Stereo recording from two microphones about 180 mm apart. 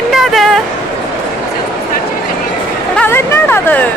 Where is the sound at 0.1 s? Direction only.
Centre (ahead or behind).